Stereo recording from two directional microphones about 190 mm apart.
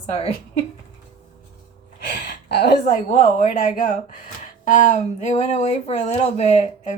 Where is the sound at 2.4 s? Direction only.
60° left (ahead or behind).